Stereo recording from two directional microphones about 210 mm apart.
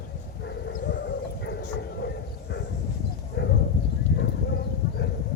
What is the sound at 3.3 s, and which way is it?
Clip-clop, 50° left (ahead or behind).